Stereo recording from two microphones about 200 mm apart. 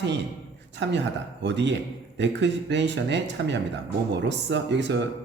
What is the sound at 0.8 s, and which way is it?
Speech, 60° right (ahead or behind).